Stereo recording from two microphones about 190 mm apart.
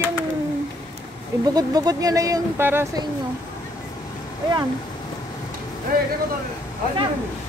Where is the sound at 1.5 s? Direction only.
20° right (ahead or behind).